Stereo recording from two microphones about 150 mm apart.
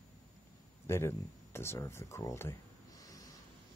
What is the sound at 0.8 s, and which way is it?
Speech, 15° left (ahead or behind).